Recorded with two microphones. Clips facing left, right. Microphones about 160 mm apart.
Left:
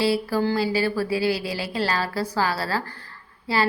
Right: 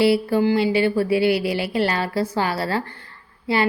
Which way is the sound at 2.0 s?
25° right (ahead or behind).